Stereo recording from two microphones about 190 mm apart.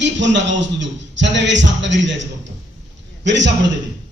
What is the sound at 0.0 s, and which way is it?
A man's voice, 70° right (ahead or behind).